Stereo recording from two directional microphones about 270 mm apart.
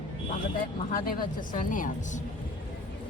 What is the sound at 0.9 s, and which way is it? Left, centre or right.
A woman's voice, left.